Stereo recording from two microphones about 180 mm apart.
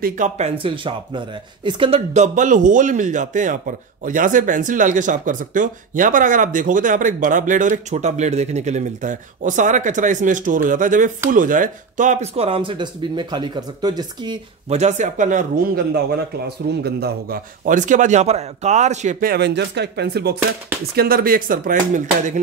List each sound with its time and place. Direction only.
0.0 s speech: 40° right (ahead or behind); by 14.4 s 25° right (ahead or behind)
14.7 s speech: 40° right (ahead or behind); by 20.3 s 65° right (ahead or behind)
20.9 s speech: 55° right (ahead or behind)